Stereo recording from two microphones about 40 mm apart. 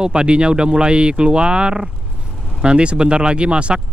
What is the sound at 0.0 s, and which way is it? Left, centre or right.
Speech, right.